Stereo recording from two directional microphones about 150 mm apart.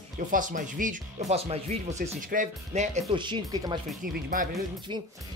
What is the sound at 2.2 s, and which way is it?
Speech, 55° right (ahead or behind).